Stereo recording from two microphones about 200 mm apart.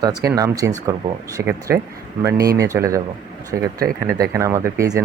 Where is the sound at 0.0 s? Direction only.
20° right (ahead or behind).